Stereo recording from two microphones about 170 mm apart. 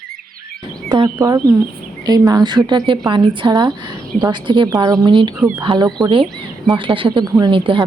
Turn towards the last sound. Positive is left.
turn(degrees=-30)  # may be behind; listen again after turning